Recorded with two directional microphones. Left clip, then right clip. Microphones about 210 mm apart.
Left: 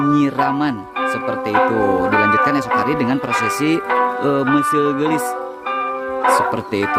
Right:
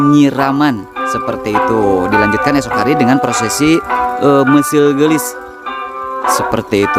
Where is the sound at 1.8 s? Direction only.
25° right (ahead or behind).